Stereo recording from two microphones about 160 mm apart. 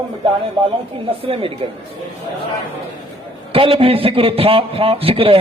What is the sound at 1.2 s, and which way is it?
Speech, 35° right (ahead or behind).